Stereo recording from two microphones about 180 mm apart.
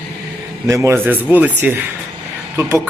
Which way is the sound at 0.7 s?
15° right (ahead or behind).